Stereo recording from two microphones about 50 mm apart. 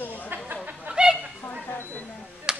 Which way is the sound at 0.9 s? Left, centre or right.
Centre.